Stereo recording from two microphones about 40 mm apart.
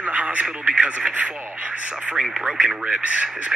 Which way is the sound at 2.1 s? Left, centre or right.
Centre.